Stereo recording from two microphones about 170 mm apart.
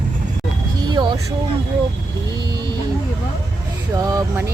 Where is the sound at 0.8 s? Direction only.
25° right (ahead or behind).